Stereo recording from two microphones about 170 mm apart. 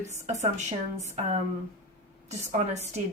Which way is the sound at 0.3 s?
45° right (ahead or behind).